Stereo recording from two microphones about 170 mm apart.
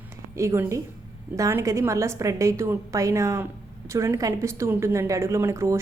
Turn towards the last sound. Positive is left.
turn(degrees=-15)  # may be behind; listen again after turning